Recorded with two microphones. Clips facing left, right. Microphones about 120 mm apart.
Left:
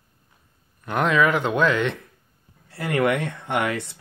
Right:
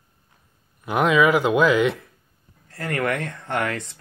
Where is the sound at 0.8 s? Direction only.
5° right (ahead or behind).